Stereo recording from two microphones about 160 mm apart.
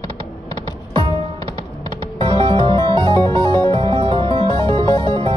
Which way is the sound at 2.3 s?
30° right (ahead or behind).